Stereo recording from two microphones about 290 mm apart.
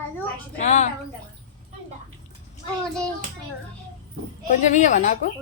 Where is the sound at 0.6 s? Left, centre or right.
Left.